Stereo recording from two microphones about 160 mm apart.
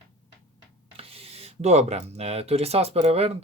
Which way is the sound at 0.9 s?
35° right (ahead or behind).